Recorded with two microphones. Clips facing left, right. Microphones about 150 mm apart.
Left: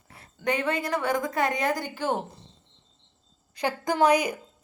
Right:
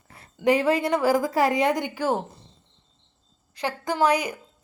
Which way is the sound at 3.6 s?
15° left (ahead or behind).